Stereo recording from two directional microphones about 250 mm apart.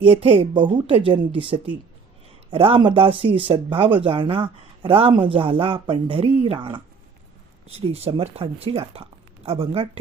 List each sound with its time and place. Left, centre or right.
0.0 s speech: right
7.9 s speech: right